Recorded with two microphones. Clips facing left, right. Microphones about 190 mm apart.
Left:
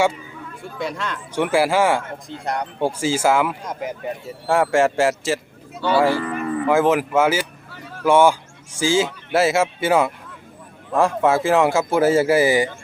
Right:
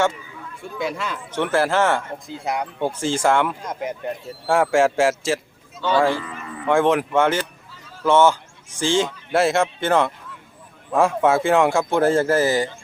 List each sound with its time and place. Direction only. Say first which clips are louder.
0.8 s speech: right 1 dB; centre (ahead or behind)
1.3 s speech: left 2 dB; 10° left (ahead or behind)
2.2 s speech: even; 5° right (ahead or behind)
2.8 s speech: left 2 dB; 10° left (ahead or behind)
6.2 s cattle: left 11 dB; 60° left (ahead or behind)
6.7 s speech: even; 5° left (ahead or behind)
7.7 s a sound: left 7 dB; 65° left (ahead or behind)
8.0 s speech: left 1 dB; 10° left (ahead or behind)